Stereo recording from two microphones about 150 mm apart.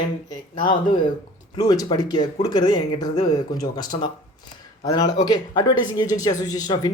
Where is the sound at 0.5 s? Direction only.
30° left (ahead or behind).